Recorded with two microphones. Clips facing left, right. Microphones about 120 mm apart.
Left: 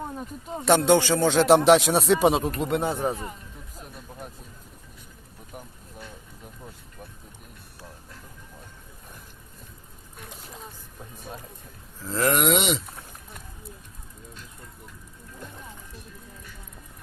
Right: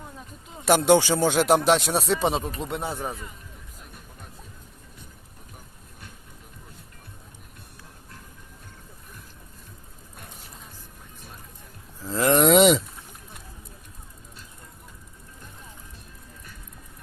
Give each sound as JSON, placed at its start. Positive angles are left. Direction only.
{"t": 0.2, "sound": "speech", "side_deg": 45}
{"t": 0.6, "sound": "speech", "side_deg": -10}
{"t": 2.9, "sound": "speech", "side_deg": 25}
{"t": 12.0, "sound": "speech", "side_deg": -20}
{"t": 12.3, "sound": "speech", "side_deg": -35}